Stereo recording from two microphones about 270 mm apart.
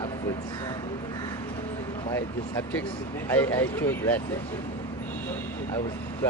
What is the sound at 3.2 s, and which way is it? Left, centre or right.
Speech, centre.